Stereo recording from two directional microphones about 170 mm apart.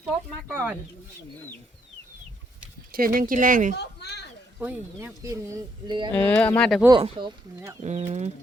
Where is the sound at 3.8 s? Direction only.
75° left (ahead or behind).